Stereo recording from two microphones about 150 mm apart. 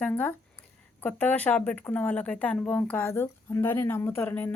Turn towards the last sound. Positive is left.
turn(degrees=10)  # may be behind; listen again after turning